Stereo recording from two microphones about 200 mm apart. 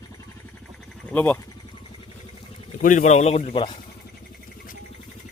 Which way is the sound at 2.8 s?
40° left (ahead or behind).